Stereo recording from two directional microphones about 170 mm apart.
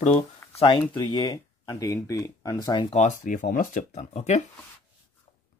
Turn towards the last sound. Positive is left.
turn(degrees=40)  # may be behind; listen again after turning